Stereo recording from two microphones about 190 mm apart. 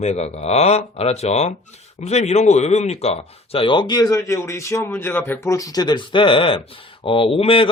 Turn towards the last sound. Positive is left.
turn(degrees=30)  # may be behind; listen again after turning